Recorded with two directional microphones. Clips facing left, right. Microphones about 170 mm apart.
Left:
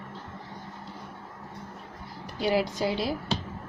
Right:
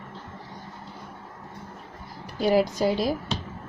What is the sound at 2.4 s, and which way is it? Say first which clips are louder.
Speech: right 4 dB; 45° right (ahead or behind).